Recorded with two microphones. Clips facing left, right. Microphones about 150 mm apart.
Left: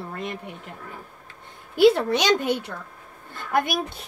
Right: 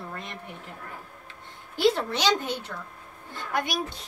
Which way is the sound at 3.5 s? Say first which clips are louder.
Left 6 dB; 55° left (ahead or behind).